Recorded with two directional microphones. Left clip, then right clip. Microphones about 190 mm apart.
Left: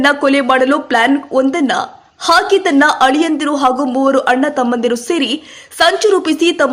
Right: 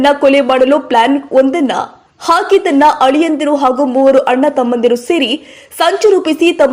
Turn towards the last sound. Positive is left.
turn(degrees=0)  # may be behind; listen again after turning